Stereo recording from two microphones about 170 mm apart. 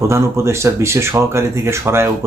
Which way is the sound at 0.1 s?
15° right (ahead or behind).